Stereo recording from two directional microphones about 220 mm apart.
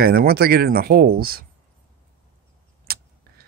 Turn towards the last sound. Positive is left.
turn(degrees=-45)  # may be behind; listen again after turning